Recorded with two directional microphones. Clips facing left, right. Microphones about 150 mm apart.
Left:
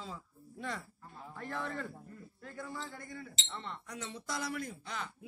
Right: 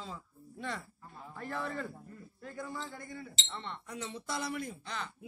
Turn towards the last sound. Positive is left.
turn(degrees=5)  # may be behind; listen again after turning